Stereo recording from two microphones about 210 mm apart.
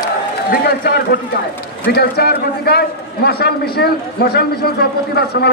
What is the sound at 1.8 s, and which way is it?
A man's voice, 50° left (ahead or behind).